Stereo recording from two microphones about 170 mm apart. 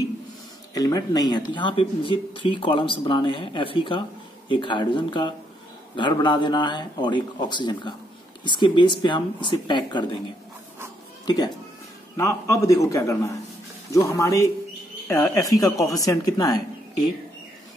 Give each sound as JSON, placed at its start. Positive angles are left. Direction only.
{"t": 0.7, "sound": "speech", "side_deg": 20}
{"t": 11.2, "sound": "speech", "side_deg": 25}